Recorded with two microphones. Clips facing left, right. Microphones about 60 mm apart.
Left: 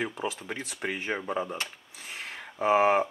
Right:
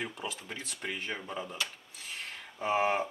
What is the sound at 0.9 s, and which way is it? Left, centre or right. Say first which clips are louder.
Speech: left 8 dB; left.